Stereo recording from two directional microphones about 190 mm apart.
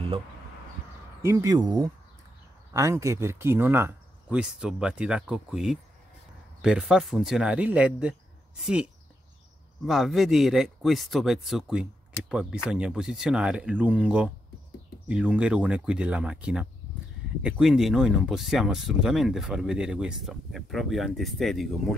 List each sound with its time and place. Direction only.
1.2 s speech: 15° right (ahead or behind)
9.8 s speech: centre (ahead or behind)